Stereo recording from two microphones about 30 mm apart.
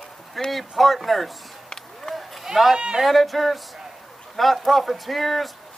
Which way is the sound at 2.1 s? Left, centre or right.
Left.